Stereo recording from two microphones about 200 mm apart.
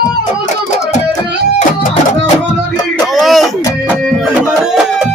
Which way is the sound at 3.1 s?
Centre (ahead or behind).